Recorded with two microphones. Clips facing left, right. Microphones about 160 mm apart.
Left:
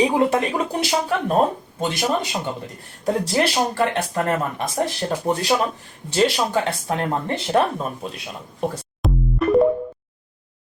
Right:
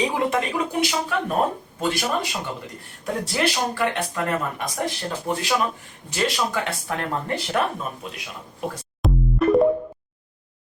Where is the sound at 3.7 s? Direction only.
30° left (ahead or behind).